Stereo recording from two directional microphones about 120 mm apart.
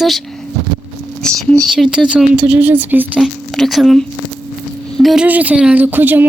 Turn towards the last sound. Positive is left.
turn(degrees=-15)  # may be behind; listen again after turning